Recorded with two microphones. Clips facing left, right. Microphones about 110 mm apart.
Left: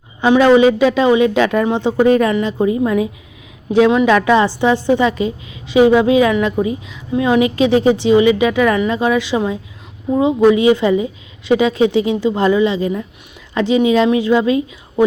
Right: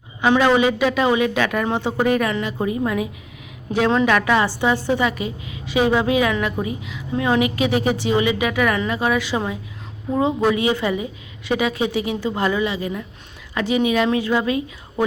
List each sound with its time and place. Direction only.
0.3 s a woman's voice: 20° left (ahead or behind)